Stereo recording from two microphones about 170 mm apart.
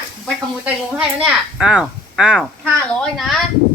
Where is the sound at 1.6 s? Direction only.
5° right (ahead or behind).